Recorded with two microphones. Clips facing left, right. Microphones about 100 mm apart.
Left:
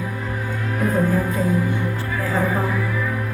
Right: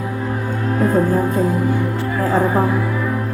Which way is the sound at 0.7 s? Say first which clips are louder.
Right 4 dB; 35° right (ahead or behind).